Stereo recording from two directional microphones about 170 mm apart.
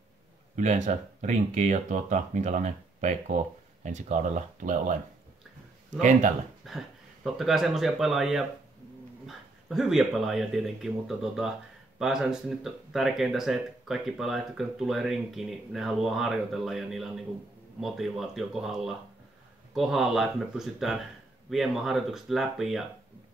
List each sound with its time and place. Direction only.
0.6 s speech: 45° right (ahead or behind)
5.9 s speech: 45° right (ahead or behind)
6.6 s speech: centre (ahead or behind)